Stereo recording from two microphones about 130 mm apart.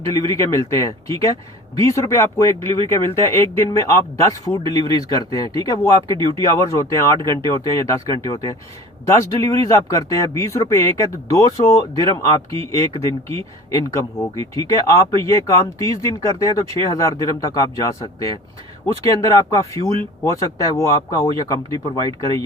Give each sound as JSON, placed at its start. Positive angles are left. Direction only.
{"t": 0.1, "sound": "speech", "side_deg": 25}
{"t": 6.1, "sound": "speech", "side_deg": -40}
{"t": 6.4, "sound": "speech", "side_deg": 25}
{"t": 19.2, "sound": "speech", "side_deg": 25}